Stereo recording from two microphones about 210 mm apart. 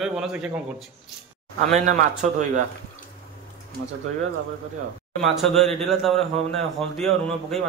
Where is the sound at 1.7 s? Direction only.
35° right (ahead or behind).